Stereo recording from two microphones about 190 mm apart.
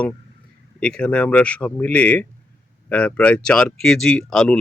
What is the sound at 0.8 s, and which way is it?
Speech, 5° left (ahead or behind).